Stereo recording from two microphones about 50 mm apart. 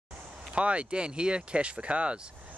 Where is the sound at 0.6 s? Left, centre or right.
Right.